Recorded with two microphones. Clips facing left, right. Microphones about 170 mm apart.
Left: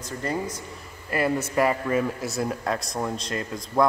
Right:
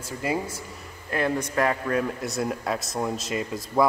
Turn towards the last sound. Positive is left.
turn(degrees=-5)  # may be behind; listen again after turning